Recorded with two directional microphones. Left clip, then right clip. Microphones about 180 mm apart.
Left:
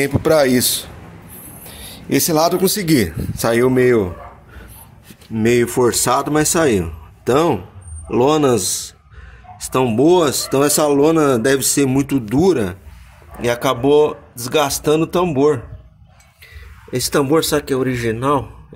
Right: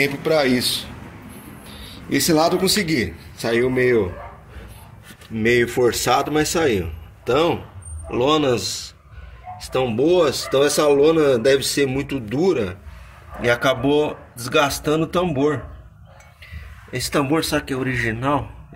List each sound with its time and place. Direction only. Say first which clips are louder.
0.0 s speech: left 4 dB; 50° left (ahead or behind)
5.3 s a man's voice: left 2 dB; 35° left (ahead or behind)
9.7 s speech: left 4 dB; 45° left (ahead or behind)
13.4 s speech: left 1 dB; 25° left (ahead or behind)
16.9 s speech: left 5 dB; 25° left (ahead or behind)